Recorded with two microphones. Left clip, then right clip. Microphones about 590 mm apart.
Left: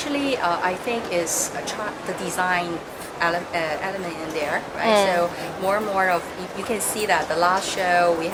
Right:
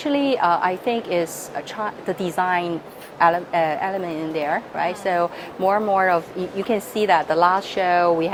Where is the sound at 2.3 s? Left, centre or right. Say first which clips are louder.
Right 1 dB; right.